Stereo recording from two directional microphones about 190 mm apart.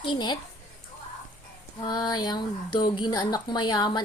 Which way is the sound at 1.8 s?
20° left (ahead or behind).